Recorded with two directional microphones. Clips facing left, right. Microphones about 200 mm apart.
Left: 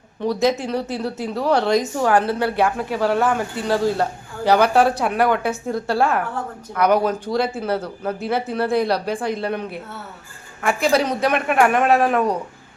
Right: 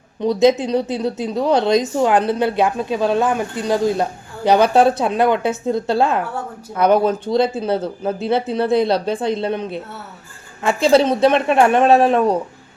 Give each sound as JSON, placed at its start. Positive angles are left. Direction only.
{"t": 0.2, "sound": "speech", "side_deg": -20}